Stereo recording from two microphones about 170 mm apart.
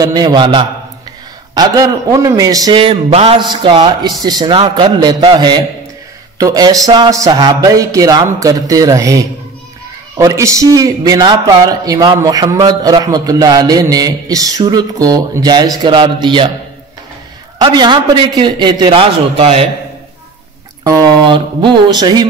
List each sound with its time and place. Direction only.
0.0 s a man's voice: 25° right (ahead or behind)
17.6 s a man's voice: 25° right (ahead or behind)
20.8 s a man's voice: 20° right (ahead or behind)